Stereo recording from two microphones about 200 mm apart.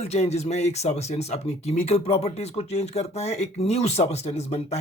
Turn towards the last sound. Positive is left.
turn(degrees=30)  # may be behind; listen again after turning